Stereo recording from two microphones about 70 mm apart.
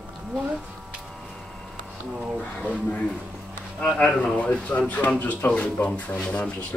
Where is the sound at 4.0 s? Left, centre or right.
Left.